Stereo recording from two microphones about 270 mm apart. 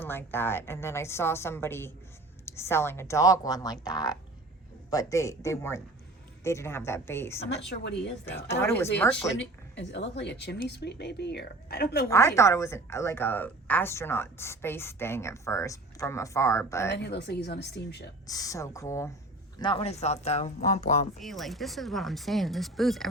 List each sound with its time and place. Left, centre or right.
0.0 s a woman's voice: centre
7.5 s a woman's voice: left
8.4 s a woman's voice: centre
9.4 s a woman's voice: left
12.0 s a woman's voice: centre
16.9 s a woman's voice: left
18.3 s a woman's voice: centre
21.2 s speech: centre